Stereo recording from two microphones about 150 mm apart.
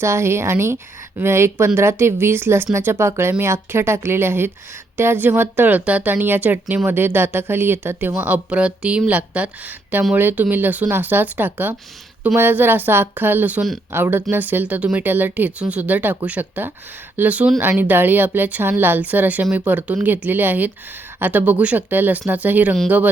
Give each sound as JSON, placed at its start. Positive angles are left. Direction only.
{"t": 0.0, "sound": "a woman's voice", "side_deg": -20}